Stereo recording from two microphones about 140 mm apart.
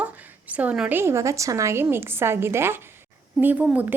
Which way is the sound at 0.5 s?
10° right (ahead or behind).